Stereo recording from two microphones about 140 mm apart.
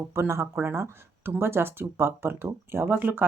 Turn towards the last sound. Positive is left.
turn(degrees=-15)  # may be behind; listen again after turning